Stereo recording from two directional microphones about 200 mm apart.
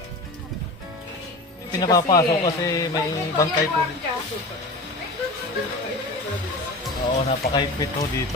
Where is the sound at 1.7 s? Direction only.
20° left (ahead or behind).